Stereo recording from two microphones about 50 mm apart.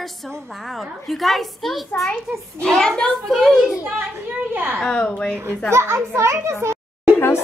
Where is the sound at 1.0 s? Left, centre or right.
Centre.